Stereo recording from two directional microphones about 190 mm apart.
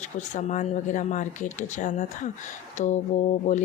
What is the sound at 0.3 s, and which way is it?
Speech, 40° left (ahead or behind).